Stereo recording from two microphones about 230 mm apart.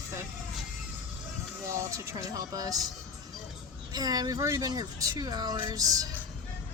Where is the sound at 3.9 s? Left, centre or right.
Centre.